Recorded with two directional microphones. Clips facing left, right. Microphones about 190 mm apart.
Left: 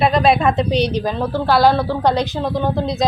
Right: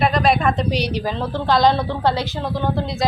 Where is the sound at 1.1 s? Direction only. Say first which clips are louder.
Left 3 dB; 10° left (ahead or behind).